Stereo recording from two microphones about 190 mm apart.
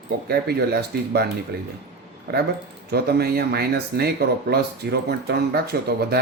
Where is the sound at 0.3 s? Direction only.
55° right (ahead or behind).